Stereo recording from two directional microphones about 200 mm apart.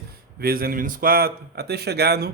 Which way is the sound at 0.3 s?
50° right (ahead or behind).